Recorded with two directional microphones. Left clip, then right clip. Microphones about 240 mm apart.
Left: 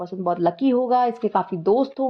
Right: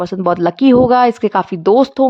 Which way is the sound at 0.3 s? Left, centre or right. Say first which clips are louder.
Right 8 dB; right.